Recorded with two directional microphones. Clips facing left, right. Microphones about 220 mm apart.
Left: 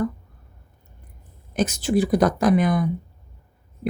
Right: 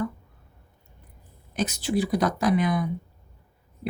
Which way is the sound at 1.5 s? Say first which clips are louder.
Left 5 dB; 45° left (ahead or behind).